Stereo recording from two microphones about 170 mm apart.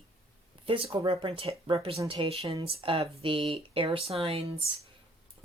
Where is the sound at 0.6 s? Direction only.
30° right (ahead or behind).